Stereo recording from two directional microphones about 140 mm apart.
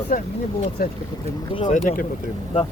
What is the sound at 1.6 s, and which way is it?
Speech, 70° left (ahead or behind).